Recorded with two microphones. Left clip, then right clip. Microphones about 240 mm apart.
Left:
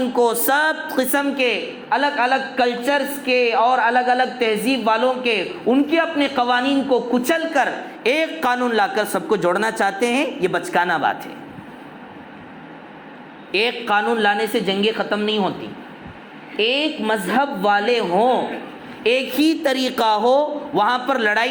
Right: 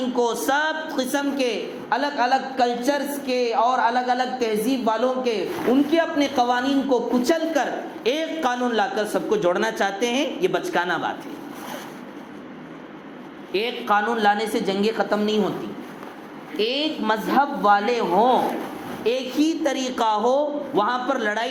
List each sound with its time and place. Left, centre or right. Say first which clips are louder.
0.2 s a woman's voice: left 4 dB; left
13.5 s a woman's voice: left 3 dB; left
16.6 s a woman's voice: left 4 dB; left